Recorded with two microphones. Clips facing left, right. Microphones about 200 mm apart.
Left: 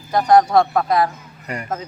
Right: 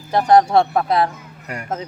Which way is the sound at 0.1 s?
25° right (ahead or behind).